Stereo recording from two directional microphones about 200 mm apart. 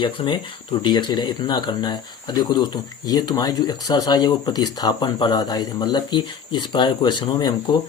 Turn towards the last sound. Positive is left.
turn(degrees=20)  # may be behind; listen again after turning